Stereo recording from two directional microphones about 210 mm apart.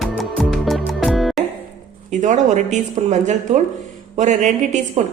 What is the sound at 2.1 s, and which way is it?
A woman's voice, 35° right (ahead or behind).